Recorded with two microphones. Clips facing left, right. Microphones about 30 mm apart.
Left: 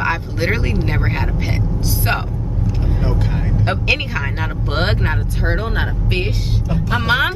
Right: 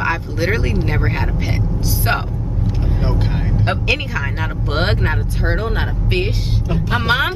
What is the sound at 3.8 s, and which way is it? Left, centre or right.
Speech, centre.